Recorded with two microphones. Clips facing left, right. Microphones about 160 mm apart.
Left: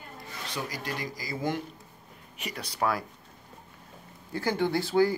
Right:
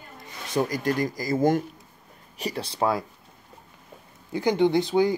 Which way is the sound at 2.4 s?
30° right (ahead or behind).